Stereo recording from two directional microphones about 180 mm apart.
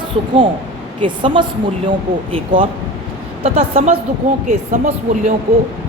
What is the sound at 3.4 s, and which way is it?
Speech, 35° right (ahead or behind).